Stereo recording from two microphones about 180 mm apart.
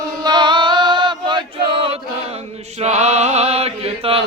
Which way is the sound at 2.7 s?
40° right (ahead or behind).